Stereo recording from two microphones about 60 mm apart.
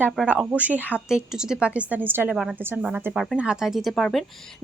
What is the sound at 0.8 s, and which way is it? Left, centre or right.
Speech, left.